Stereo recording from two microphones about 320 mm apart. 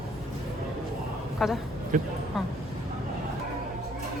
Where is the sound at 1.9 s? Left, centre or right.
Right.